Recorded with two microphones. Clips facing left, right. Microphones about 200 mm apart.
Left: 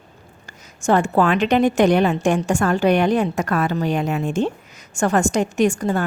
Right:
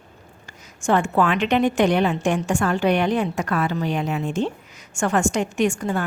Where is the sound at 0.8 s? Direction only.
40° left (ahead or behind).